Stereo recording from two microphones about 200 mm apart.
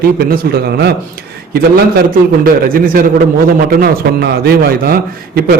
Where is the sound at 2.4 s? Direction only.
45° right (ahead or behind).